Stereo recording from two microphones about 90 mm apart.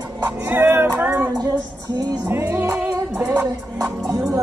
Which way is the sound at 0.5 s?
25° right (ahead or behind).